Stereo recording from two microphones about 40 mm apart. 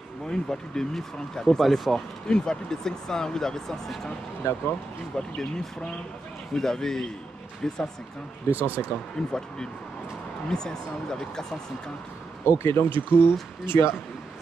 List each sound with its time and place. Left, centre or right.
0.3 s speech: centre
2.2 s speech: centre
5.1 s speech: centre
6.5 s speech: centre
8.5 s speech: right
9.2 s speech: centre
10.5 s speech: centre
12.4 s speech: left